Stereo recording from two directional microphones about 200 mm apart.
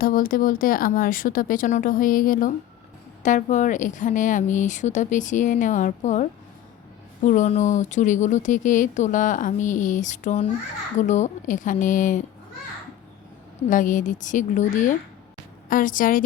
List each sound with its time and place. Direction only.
0.0 s speech: 45° left (ahead or behind)
13.7 s speech: 40° left (ahead or behind)